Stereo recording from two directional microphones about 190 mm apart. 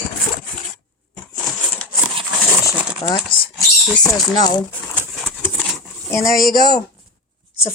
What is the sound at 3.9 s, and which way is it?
Speech, 20° left (ahead or behind).